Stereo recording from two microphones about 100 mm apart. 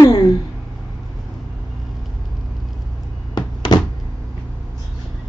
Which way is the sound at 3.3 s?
45° left (ahead or behind).